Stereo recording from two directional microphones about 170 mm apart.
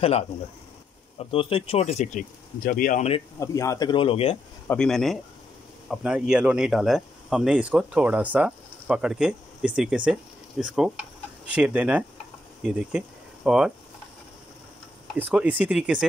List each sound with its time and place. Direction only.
1.1 s speech: 30° left (ahead or behind)
2.6 s speech: 50° left (ahead or behind)
3.3 s speech: 20° left (ahead or behind); by 4.4 s 35° left (ahead or behind)
4.6 s speech: 5° left (ahead or behind)
15.1 s speech: 10° right (ahead or behind)